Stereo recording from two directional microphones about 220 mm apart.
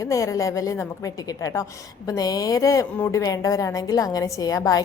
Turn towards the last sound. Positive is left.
turn(degrees=15)  # may be behind; listen again after turning